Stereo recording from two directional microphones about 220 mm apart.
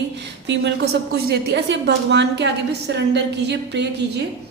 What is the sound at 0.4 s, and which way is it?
A woman's voice, 55° right (ahead or behind).